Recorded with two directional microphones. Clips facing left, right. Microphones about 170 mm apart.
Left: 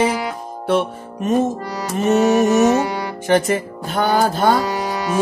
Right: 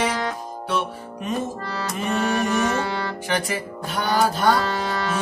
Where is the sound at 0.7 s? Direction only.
45° left (ahead or behind).